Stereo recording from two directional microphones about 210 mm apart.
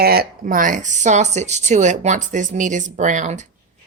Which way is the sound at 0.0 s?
45° right (ahead or behind).